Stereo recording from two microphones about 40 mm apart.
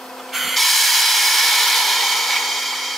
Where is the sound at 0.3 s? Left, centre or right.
Centre.